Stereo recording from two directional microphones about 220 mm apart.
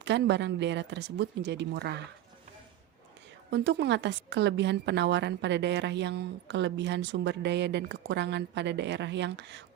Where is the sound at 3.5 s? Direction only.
55° right (ahead or behind).